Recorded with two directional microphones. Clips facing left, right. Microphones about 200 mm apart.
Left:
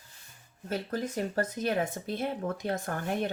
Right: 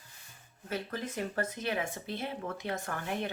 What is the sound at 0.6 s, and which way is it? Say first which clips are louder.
Speech: left 4 dB; 45° left (ahead or behind).